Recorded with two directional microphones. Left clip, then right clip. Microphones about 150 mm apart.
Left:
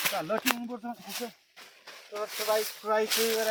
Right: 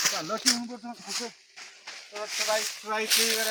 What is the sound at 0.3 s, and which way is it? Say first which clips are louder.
Speech: right 2 dB; 35° left (ahead or behind).